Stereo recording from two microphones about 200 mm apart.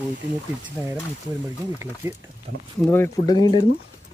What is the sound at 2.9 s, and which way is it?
Speech, 15° left (ahead or behind).